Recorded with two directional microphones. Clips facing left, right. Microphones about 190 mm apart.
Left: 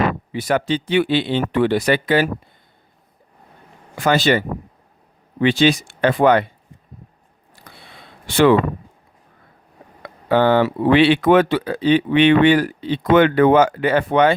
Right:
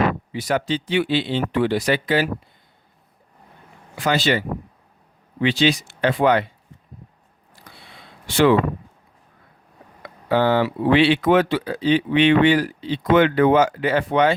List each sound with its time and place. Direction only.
0.3 s speech: 55° left (ahead or behind)
3.9 s speech: 50° left (ahead or behind)
10.2 s speech: 60° left (ahead or behind)